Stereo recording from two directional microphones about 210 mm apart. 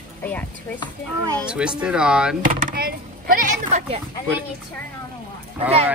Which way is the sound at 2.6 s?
45° right (ahead or behind).